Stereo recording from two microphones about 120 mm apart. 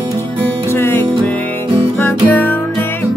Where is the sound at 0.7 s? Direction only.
20° left (ahead or behind).